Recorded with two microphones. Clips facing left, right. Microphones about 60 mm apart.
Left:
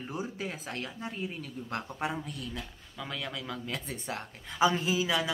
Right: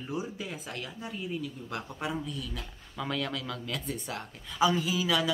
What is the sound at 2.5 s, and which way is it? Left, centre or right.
Speech, centre.